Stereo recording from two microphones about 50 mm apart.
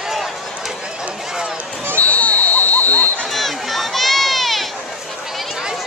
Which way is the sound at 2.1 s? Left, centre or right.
Left.